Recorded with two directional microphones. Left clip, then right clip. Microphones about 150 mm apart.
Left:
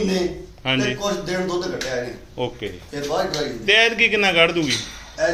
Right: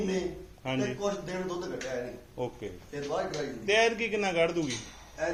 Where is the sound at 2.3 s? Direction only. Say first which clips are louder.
Left 10 dB; 5° right (ahead or behind).